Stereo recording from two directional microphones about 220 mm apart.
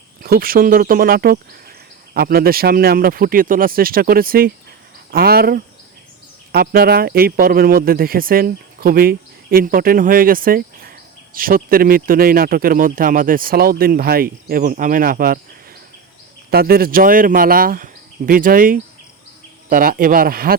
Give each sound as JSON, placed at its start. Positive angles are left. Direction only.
{"t": 0.2, "sound": "speech", "side_deg": -40}
{"t": 16.5, "sound": "speech", "side_deg": -45}